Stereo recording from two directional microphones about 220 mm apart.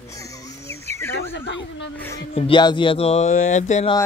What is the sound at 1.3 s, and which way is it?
Speech, 55° left (ahead or behind).